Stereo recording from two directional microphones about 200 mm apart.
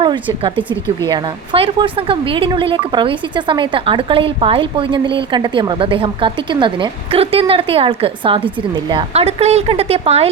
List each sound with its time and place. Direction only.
0.0 s a woman's voice: 25° right (ahead or behind)